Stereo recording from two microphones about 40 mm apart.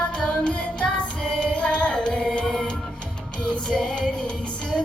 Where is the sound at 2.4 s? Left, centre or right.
Centre.